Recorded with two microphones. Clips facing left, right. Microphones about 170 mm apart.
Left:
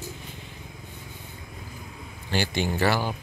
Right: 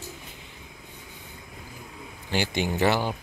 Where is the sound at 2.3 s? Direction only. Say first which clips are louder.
Even; 15° right (ahead or behind).